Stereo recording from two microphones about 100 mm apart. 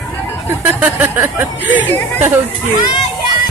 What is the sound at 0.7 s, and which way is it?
Speech, 20° right (ahead or behind).